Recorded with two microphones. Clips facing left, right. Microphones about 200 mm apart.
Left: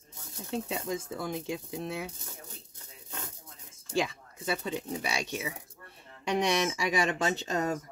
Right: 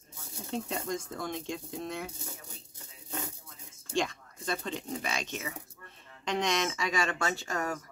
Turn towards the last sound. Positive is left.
turn(degrees=20)  # may be behind; listen again after turning